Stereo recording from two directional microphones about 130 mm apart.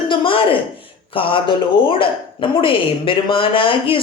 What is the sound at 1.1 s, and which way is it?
A woman's voice, 45° left (ahead or behind).